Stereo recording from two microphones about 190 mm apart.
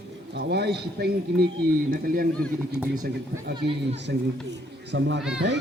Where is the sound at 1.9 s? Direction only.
50° right (ahead or behind).